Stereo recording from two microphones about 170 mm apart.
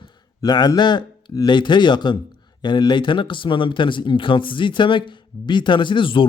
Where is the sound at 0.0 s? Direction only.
25° left (ahead or behind).